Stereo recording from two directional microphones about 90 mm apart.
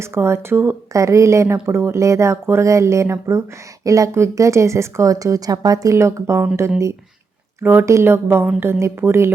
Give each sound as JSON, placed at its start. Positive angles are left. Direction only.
{"t": 0.0, "sound": "speech", "side_deg": -30}
{"t": 7.6, "sound": "speech", "side_deg": -20}